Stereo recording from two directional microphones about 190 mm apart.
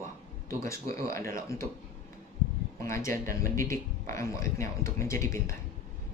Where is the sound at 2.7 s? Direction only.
15° left (ahead or behind).